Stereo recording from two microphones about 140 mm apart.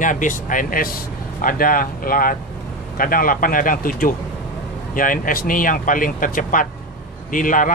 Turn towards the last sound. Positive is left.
turn(degrees=75)  # may be behind; listen again after turning